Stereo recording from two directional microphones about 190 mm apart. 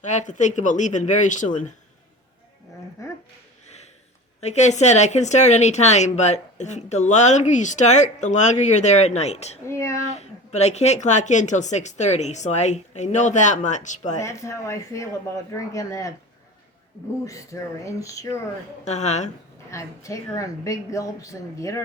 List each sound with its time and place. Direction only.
0.0 s speech: 40° left (ahead or behind)
3.0 s a sound: 15° left (ahead or behind)
4.4 s speech: 35° left (ahead or behind)
9.6 s a woman's voice: 15° left (ahead or behind)
10.1 s speech: 35° left (ahead or behind)
14.2 s a woman's voice: 15° left (ahead or behind)
17.2 s a woman's voice: 15° left (ahead or behind)
18.9 s speech: 35° left (ahead or behind)
19.7 s a woman's voice: 15° left (ahead or behind)